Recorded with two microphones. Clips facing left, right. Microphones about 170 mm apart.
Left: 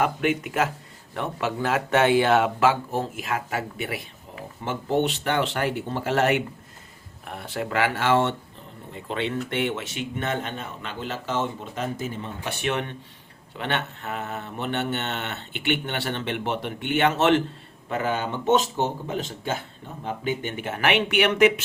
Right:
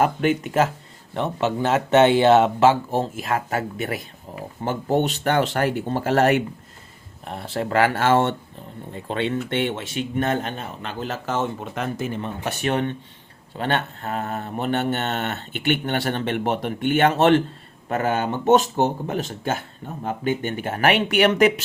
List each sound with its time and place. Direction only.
0.0 s speech: 35° right (ahead or behind)
7.3 s speech: 30° right (ahead or behind)
9.0 s speech: 30° right (ahead or behind); by 12.5 s 60° right (ahead or behind)
12.5 s speech: 40° right (ahead or behind)
17.8 s speech: 45° right (ahead or behind)